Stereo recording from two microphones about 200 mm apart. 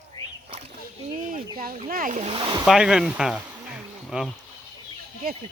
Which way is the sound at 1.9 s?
40° right (ahead or behind).